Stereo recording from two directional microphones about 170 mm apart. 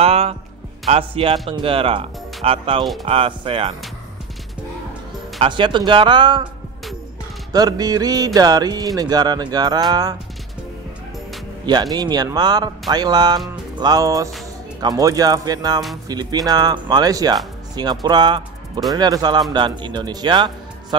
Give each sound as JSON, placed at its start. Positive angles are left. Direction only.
{"t": 0.0, "sound": "music", "side_deg": -35}
{"t": 0.8, "sound": "speech", "side_deg": -35}
{"t": 5.4, "sound": "speech", "side_deg": -30}
{"t": 7.5, "sound": "speech", "side_deg": -20}
{"t": 11.6, "sound": "speech", "side_deg": -25}